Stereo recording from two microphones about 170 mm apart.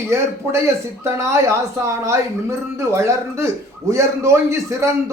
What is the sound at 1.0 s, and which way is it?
Speech, 15° right (ahead or behind).